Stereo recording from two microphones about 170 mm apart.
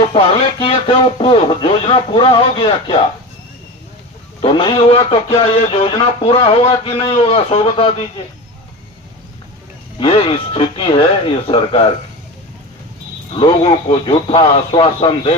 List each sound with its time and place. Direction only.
0.1 s speech: 30° left (ahead or behind)
4.4 s speech: 30° left (ahead or behind)
10.0 s speech: 30° left (ahead or behind)
13.3 s speech: 30° left (ahead or behind)